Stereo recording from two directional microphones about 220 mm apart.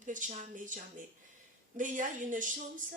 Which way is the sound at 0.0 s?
35° right (ahead or behind).